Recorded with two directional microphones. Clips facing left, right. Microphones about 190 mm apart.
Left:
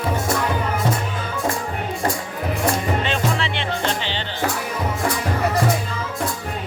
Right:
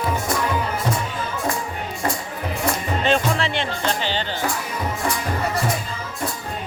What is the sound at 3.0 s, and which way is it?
Music, 45° right (ahead or behind).